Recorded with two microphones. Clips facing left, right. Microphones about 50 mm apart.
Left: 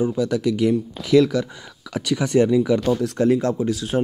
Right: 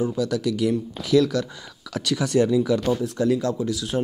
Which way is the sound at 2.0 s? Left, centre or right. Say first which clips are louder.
Left 2 dB; left.